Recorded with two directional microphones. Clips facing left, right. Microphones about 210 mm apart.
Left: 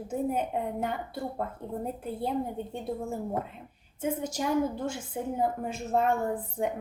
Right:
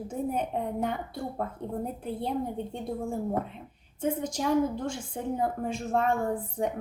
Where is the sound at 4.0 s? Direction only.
10° left (ahead or behind).